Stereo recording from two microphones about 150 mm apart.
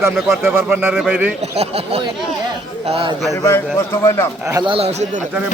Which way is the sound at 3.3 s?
20° left (ahead or behind).